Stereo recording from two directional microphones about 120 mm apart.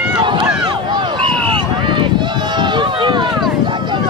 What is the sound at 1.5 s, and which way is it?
Run, 45° right (ahead or behind).